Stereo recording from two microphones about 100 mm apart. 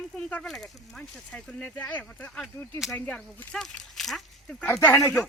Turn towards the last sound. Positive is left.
turn(degrees=30)  # may be behind; listen again after turning